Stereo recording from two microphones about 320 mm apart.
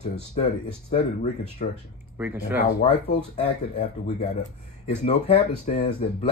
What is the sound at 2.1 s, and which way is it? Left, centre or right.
Speech, centre.